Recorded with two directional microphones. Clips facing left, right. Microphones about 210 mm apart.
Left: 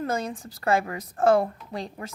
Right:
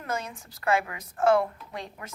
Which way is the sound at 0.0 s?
35° left (ahead or behind).